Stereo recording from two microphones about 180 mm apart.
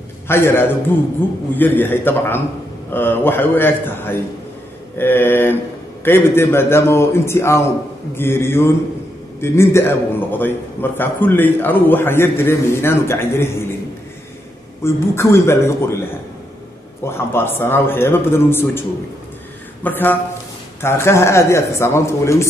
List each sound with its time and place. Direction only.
0.3 s a man's voice: 15° left (ahead or behind)
14.8 s a man's voice: 15° left (ahead or behind)